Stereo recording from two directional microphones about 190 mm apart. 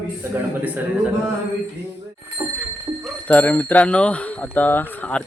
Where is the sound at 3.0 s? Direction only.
10° left (ahead or behind).